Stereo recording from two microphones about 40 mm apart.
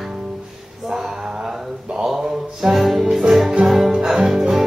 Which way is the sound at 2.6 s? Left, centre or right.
Centre.